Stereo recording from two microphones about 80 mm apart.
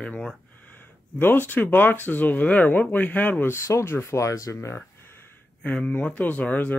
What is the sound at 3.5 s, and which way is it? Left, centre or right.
Speech, left.